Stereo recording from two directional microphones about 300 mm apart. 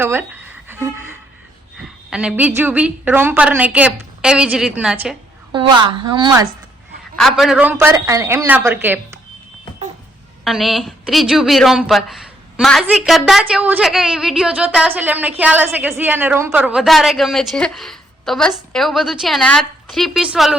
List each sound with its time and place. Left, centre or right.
0.0 s a woman's voice: centre
0.7 s a sound: centre
2.0 s a woman's voice: centre
5.5 s a woman's voice: centre
7.2 s a woman's voice: centre
10.4 s a woman's voice: centre